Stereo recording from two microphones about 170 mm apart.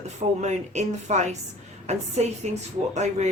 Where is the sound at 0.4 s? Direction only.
40° right (ahead or behind).